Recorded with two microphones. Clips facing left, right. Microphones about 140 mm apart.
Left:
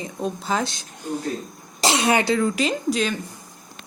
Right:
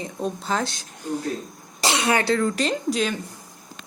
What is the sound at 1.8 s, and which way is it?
Speech, 20° left (ahead or behind).